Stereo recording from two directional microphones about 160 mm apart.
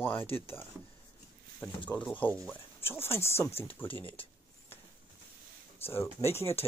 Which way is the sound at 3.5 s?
40° left (ahead or behind).